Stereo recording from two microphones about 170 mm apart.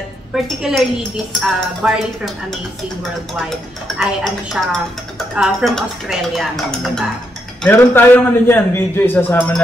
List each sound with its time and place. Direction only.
0.3 s speech: 5° right (ahead or behind)
3.4 s speech: centre (ahead or behind)
7.6 s a man's voice: 10° left (ahead or behind)